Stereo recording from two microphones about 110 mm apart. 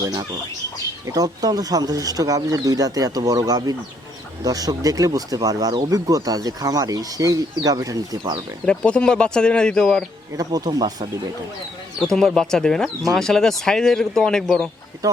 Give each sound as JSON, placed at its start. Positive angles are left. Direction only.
{"t": 1.0, "sound": "speech", "side_deg": -35}
{"t": 8.6, "sound": "speech", "side_deg": 10}
{"t": 10.3, "sound": "speech", "side_deg": -35}
{"t": 11.9, "sound": "speech", "side_deg": 5}